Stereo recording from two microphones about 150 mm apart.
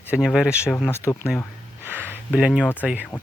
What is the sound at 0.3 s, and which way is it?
Speech, 5° right (ahead or behind).